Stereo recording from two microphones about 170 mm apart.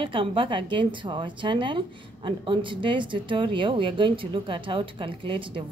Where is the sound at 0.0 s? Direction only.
30° right (ahead or behind).